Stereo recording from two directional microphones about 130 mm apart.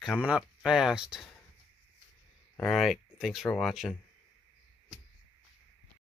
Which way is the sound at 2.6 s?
Centre (ahead or behind).